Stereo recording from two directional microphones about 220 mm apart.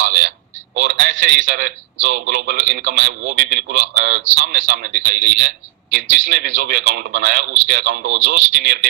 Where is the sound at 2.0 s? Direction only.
45° right (ahead or behind).